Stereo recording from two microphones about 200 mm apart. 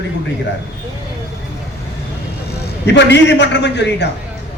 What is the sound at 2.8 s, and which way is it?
A man's voice, 60° left (ahead or behind).